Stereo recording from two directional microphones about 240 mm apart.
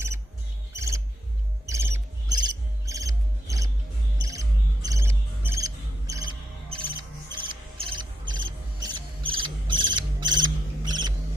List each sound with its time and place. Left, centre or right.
0.7 s music: centre
4.3 s cricket: centre
7.0 s music: centre